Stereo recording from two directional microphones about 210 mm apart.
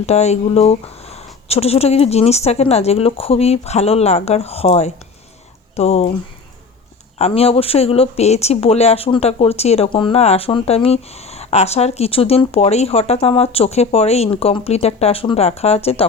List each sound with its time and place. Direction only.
0.0 s speech: 30° left (ahead or behind)
7.2 s speech: 30° left (ahead or behind)